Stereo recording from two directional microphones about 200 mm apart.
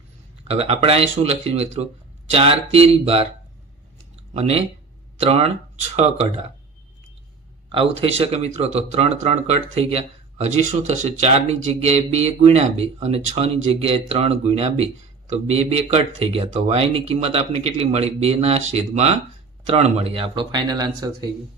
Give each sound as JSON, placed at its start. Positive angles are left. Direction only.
{"t": 0.4, "sound": "speech", "side_deg": -30}
{"t": 4.4, "sound": "speech", "side_deg": -30}
{"t": 7.7, "sound": "speech", "side_deg": -25}